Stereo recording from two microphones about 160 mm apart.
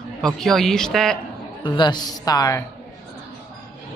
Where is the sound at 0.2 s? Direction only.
Centre (ahead or behind).